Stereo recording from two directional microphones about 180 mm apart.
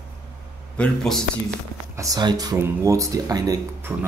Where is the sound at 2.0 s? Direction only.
20° right (ahead or behind).